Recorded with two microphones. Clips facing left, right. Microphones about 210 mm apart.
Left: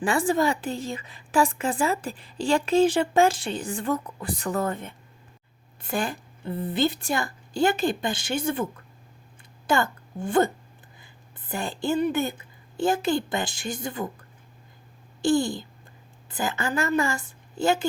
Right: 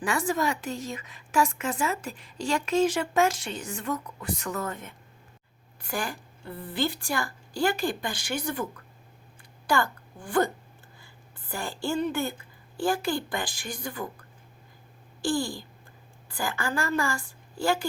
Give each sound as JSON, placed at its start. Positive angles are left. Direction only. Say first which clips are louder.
{"t": 0.0, "sound": "a woman's voice", "louder": "left 4 dB", "side_deg": 30}
{"t": 9.6, "sound": "a woman's voice", "louder": "left 2 dB", "side_deg": 25}
{"t": 15.2, "sound": "a woman's voice", "louder": "left 6 dB", "side_deg": 20}